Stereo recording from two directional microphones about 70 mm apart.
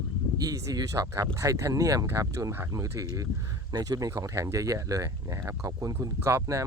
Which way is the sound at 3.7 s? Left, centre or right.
Right.